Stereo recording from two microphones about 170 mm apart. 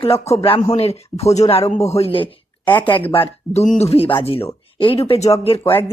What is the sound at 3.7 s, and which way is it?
Speech, 40° left (ahead or behind).